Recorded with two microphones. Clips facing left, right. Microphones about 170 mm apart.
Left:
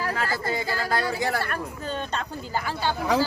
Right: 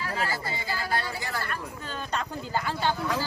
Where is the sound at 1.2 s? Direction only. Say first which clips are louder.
Left 7 dB; 65° left (ahead or behind).